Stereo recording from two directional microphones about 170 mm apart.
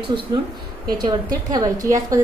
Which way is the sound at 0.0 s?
30° right (ahead or behind).